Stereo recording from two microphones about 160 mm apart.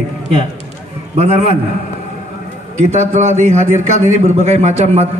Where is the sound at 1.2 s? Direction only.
40° right (ahead or behind).